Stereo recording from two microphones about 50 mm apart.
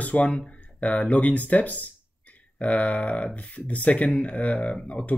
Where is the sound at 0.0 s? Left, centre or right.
Left.